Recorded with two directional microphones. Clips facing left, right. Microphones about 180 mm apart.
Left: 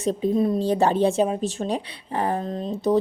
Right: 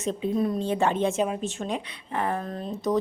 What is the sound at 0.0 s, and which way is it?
A woman's voice, 35° left (ahead or behind).